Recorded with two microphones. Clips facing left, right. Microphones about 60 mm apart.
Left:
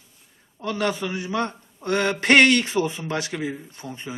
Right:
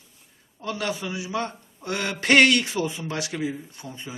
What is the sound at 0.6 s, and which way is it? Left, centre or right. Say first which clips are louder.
A man's voice: left 4 dB; left.